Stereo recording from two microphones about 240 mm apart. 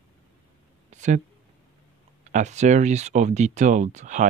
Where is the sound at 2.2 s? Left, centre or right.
Right.